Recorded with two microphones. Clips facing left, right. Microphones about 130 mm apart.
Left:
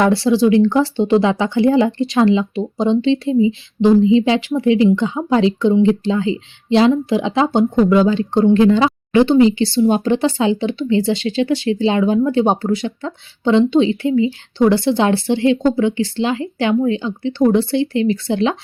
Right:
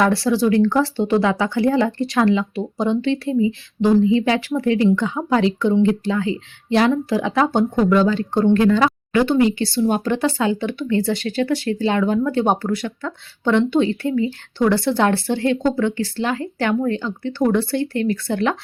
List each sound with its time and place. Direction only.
0.0 s speech: 25° left (ahead or behind)